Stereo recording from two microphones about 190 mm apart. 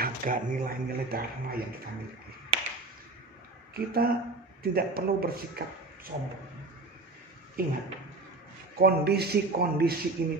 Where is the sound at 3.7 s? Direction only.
50° right (ahead or behind).